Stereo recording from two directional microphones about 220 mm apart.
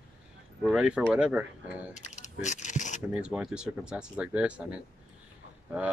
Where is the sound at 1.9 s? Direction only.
30° left (ahead or behind).